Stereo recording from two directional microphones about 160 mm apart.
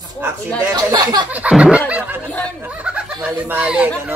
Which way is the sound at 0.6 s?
20° right (ahead or behind).